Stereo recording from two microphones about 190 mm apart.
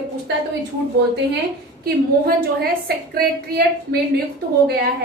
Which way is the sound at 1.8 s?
55° right (ahead or behind).